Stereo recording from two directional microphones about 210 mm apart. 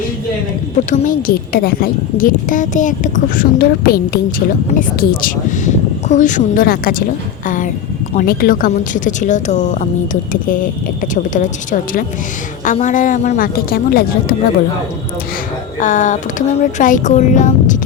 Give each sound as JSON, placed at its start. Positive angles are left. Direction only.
{"t": 0.9, "sound": "a woman's voice", "side_deg": 40}
{"t": 7.4, "sound": "a sound", "side_deg": 40}
{"t": 8.2, "sound": "a woman's voice", "side_deg": 45}
{"t": 15.8, "sound": "a woman's voice", "side_deg": 35}